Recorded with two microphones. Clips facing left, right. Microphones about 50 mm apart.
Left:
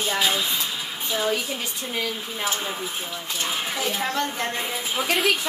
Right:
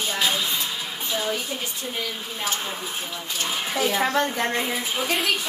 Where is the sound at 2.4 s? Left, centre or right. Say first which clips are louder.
Left 1 dB; centre.